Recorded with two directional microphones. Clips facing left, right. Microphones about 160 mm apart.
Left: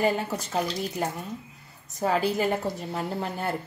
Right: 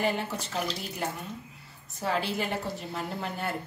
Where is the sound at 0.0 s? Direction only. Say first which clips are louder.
Left 4 dB; 45° left (ahead or behind).